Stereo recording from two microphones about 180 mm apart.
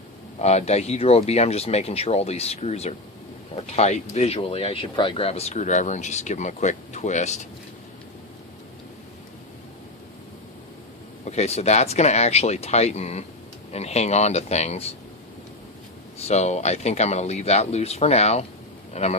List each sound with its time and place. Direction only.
0.4 s speech: 35° left (ahead or behind)
11.3 s speech: 35° left (ahead or behind)
16.2 s speech: 40° left (ahead or behind)